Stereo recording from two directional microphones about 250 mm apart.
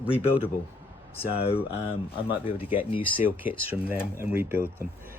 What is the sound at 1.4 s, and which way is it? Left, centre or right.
Speech, left.